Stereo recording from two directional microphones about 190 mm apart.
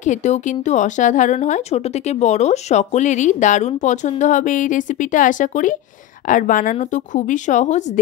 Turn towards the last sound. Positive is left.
turn(degrees=40)  # may be behind; listen again after turning